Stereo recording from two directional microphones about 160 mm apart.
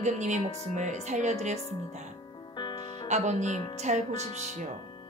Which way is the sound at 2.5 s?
30° left (ahead or behind).